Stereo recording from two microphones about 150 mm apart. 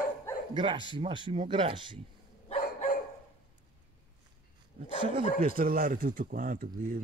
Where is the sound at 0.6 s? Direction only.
30° right (ahead or behind).